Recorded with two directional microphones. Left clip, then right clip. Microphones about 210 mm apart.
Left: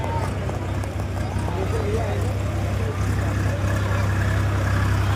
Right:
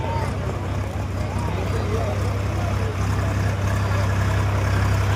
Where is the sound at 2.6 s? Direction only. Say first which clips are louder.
Right 1 dB; 20° right (ahead or behind).